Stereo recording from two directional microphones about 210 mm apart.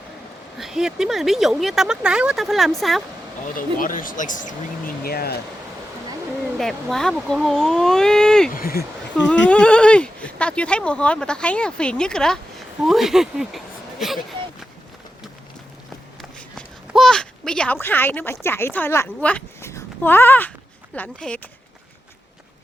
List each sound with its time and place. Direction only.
0.6 s speech: centre (ahead or behind)
3.8 s speech: 40° left (ahead or behind)
6.6 s speech: centre (ahead or behind)
8.4 s speech: 45° left (ahead or behind)
9.1 s speech: 5° left (ahead or behind)
16.6 s speech: centre (ahead or behind)